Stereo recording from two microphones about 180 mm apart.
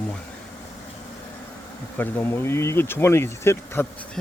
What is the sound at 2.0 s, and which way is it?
Speech, 10° left (ahead or behind).